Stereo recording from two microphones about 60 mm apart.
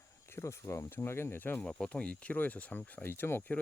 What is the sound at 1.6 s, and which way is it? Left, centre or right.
Speech, centre.